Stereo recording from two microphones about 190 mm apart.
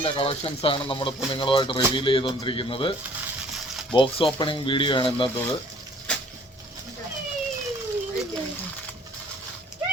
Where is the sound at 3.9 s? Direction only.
25° left (ahead or behind).